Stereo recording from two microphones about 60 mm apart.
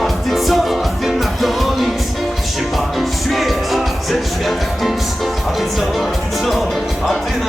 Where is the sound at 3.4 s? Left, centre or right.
Centre.